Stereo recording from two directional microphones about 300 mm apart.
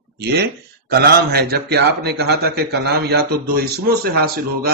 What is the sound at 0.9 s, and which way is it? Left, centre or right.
A man's voice, right.